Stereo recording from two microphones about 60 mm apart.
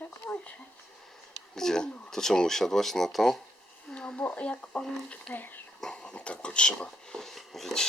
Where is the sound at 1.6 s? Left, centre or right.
Centre.